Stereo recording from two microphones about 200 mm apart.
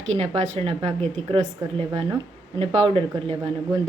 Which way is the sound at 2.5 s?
30° right (ahead or behind).